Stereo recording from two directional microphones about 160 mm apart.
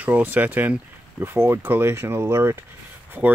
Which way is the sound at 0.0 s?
10° right (ahead or behind).